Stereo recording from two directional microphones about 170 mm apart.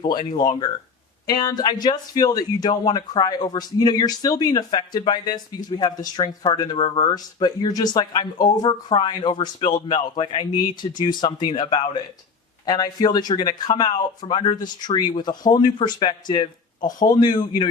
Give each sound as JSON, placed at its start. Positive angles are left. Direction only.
{"t": 0.0, "sound": "speech", "side_deg": 25}